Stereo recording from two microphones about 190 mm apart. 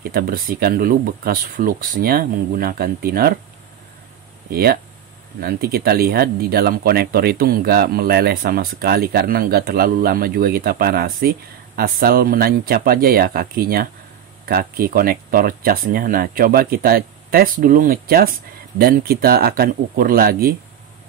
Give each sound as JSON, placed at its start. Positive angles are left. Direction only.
{"t": 0.1, "sound": "speech", "side_deg": -50}
{"t": 4.5, "sound": "speech", "side_deg": -55}